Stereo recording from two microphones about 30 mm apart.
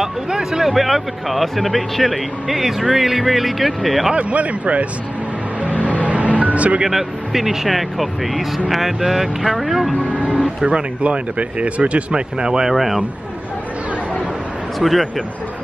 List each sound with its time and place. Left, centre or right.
0.3 s speech: centre
0.7 s speech: centre
4.1 s speech: right
5.6 s music: right
6.9 s speech: centre
10.6 s speech: right
12.1 s speech: right
12.6 s speech: centre
14.8 s speech: centre